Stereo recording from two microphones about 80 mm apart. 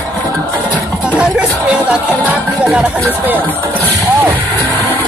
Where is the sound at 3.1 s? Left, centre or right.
Right.